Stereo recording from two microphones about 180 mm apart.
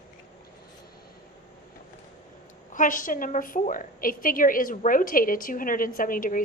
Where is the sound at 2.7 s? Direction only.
45° left (ahead or behind).